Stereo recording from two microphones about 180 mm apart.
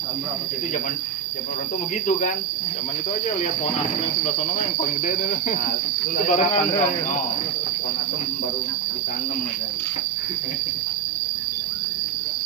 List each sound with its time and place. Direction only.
6.2 s speech: 40° left (ahead or behind)